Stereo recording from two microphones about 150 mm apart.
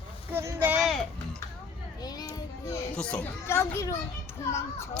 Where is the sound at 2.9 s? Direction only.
5° left (ahead or behind).